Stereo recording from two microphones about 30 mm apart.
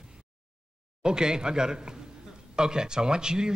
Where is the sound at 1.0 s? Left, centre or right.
Right.